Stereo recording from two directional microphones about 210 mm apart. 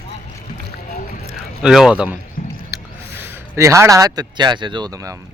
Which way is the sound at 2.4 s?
45° left (ahead or behind).